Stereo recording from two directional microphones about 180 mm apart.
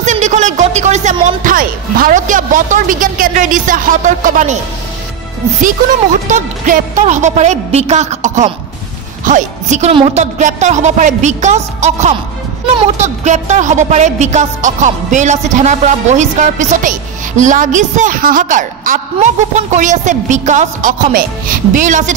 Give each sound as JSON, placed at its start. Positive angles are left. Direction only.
{"t": 0.0, "sound": "speech", "side_deg": -40}
{"t": 6.2, "sound": "speech", "side_deg": -45}